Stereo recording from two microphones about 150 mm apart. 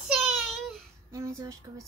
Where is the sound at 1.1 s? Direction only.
20° right (ahead or behind).